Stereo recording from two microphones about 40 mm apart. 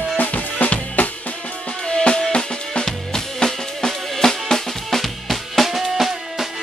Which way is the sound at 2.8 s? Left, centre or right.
Centre.